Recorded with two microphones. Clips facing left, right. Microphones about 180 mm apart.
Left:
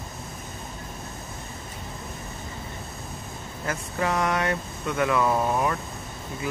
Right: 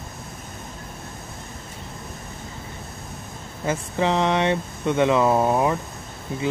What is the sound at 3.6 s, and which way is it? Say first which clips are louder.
Speech: right 5 dB; 25° right (ahead or behind).